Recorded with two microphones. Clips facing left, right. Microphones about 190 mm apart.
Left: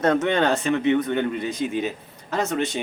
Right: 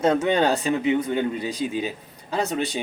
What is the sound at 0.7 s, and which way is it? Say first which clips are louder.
Speech: left 1 dB; 10° right (ahead or behind).